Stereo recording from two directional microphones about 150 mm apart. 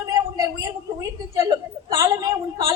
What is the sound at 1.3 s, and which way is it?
Whimper, 20° right (ahead or behind).